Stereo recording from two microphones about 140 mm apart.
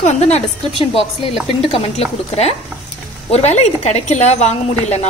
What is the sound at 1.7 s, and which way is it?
A woman's voice, 45° left (ahead or behind).